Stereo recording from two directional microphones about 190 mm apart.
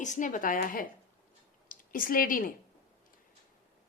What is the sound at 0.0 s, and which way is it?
A woman's voice, 40° left (ahead or behind).